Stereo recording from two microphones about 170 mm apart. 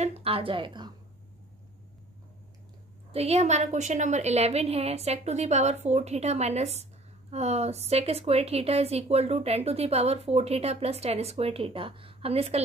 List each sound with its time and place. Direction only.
0.0 s a woman's voice: 35° right (ahead or behind)
3.1 s a woman's voice: 40° right (ahead or behind)